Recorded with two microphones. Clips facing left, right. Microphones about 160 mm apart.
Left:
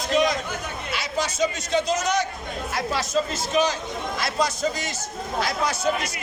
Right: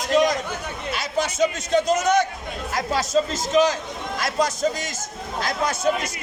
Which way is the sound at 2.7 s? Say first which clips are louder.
Right 3 dB; 40° right (ahead or behind).